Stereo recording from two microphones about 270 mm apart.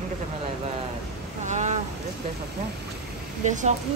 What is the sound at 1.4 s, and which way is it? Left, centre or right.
Speech, right.